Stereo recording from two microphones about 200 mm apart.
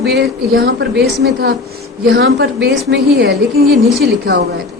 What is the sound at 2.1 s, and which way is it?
A woman's voice, 65° right (ahead or behind).